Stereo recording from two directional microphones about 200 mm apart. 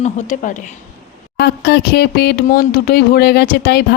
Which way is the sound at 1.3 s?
55° left (ahead or behind).